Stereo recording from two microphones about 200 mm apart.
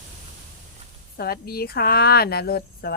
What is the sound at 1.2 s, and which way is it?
Speech, 50° left (ahead or behind).